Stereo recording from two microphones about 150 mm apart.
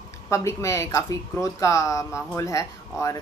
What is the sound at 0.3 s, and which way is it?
Speech, 20° left (ahead or behind).